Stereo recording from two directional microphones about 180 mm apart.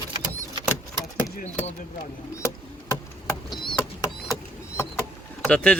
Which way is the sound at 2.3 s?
15° left (ahead or behind).